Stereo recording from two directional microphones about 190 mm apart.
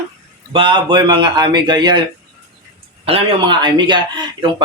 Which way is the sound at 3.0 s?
30° right (ahead or behind).